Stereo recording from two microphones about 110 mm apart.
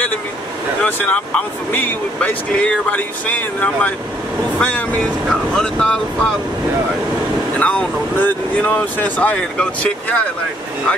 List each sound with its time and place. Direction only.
0.8 s speech: 15° left (ahead or behind)
7.5 s speech: 15° left (ahead or behind)